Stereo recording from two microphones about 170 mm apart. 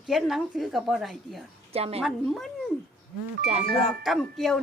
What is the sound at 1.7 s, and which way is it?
Speech, 35° right (ahead or behind).